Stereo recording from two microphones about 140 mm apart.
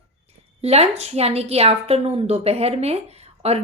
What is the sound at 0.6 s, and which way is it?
A woman's voice, 50° right (ahead or behind).